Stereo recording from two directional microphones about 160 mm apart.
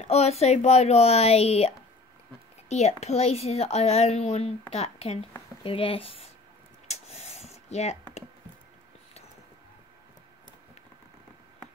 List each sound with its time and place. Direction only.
0.1 s speech: 40° left (ahead or behind)
2.7 s speech: 45° left (ahead or behind)
6.9 s rub: 45° left (ahead or behind)